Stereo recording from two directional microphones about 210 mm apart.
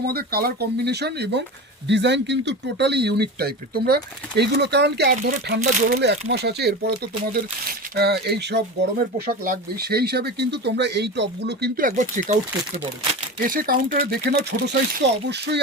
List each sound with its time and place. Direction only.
0.0 s speech: 50° right (ahead or behind)